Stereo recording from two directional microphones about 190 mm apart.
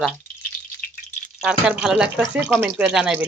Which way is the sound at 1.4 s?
5° right (ahead or behind).